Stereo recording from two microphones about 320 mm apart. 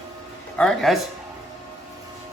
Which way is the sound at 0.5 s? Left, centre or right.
Centre.